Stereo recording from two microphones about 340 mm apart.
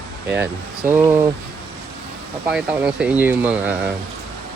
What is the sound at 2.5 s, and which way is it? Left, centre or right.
Speech, centre.